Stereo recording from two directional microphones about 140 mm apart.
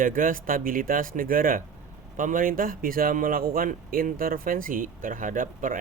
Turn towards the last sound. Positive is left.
turn(degrees=-70)  # may be behind; listen again after turning